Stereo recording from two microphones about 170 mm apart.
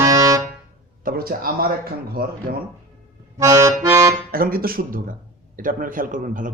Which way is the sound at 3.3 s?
15° right (ahead or behind).